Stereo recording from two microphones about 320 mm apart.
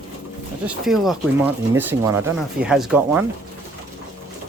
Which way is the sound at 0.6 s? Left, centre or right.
Centre.